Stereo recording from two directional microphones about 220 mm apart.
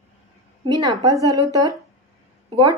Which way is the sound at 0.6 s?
20° right (ahead or behind).